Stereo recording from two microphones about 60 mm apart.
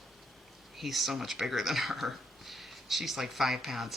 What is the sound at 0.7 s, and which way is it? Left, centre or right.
Speech, centre.